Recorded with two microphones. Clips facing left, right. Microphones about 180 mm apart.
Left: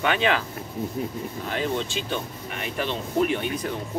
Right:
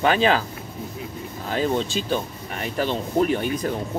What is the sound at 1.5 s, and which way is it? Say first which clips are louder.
Speech: right 5 dB; 35° right (ahead or behind).